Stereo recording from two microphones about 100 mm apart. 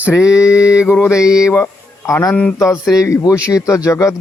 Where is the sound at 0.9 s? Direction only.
15° left (ahead or behind).